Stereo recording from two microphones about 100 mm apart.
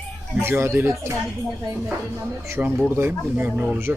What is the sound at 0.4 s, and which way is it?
Speech, 25° right (ahead or behind).